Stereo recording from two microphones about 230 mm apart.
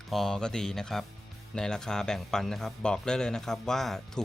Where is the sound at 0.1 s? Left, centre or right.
Centre.